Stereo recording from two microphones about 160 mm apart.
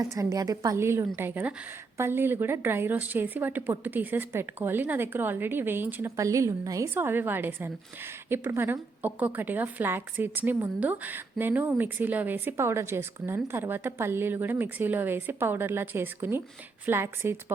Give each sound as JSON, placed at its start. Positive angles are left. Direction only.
{"t": 0.0, "sound": "a woman's voice", "side_deg": -20}